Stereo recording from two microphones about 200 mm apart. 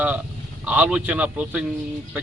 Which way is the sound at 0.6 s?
5° right (ahead or behind).